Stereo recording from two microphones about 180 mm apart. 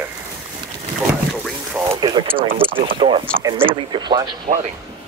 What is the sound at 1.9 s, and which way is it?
Speech, 25° right (ahead or behind).